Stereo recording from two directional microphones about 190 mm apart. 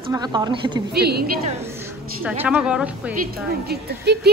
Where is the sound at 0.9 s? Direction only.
60° right (ahead or behind).